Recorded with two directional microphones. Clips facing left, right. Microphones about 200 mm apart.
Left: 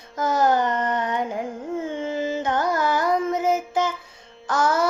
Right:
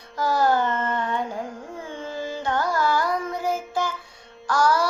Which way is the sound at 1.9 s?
20° left (ahead or behind).